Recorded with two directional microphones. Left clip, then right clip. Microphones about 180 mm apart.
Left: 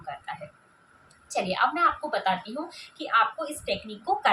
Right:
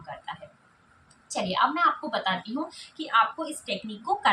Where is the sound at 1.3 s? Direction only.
20° left (ahead or behind).